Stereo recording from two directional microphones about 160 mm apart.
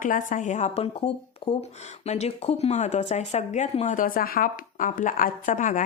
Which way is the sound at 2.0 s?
45° left (ahead or behind).